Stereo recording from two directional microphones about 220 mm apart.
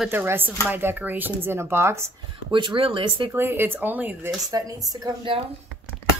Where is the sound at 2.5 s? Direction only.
20° right (ahead or behind).